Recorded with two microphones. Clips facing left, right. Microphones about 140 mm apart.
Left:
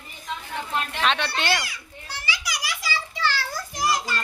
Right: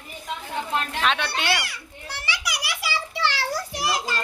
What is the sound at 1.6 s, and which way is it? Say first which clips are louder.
Children playing: right 1 dB; 65° right (ahead or behind).